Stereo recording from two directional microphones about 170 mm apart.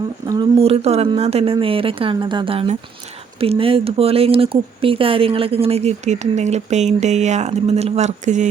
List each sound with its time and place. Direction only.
0.6 s speech: 35° right (ahead or behind)